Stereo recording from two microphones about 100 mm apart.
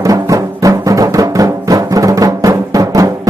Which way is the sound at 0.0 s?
35° right (ahead or behind).